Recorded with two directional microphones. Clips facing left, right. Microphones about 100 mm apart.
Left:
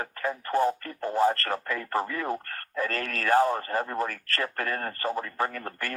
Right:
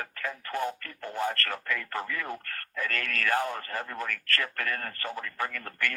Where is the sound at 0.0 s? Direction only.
30° left (ahead or behind).